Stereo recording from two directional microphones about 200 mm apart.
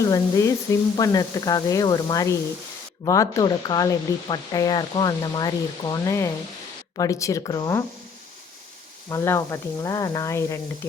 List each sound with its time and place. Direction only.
0.0 s speech: 15° left (ahead or behind)
9.0 s speech: 15° left (ahead or behind)